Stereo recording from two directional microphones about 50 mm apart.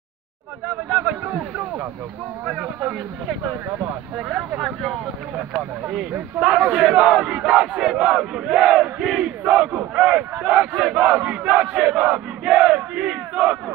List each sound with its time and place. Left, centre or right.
0.8 s speech: right
6.6 s battle cry: centre
9.4 s battle cry: centre
11.1 s crowd: right
11.5 s battle cry: centre